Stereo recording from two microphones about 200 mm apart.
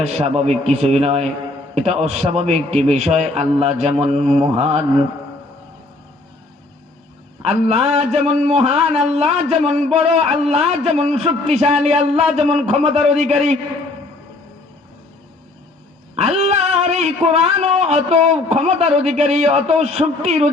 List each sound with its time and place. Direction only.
0.0 s a man's voice: 30° right (ahead or behind)
4.2 s mantra: 5° left (ahead or behind)
4.4 s a man's voice: 30° right (ahead or behind)
7.4 s a man's voice: 30° right (ahead or behind)
16.1 s a man's voice: 30° right (ahead or behind)